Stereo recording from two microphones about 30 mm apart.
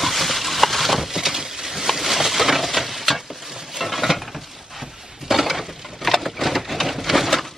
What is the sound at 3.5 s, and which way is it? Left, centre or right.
Stir, centre.